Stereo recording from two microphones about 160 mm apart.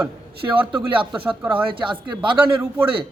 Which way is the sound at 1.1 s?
10° right (ahead or behind).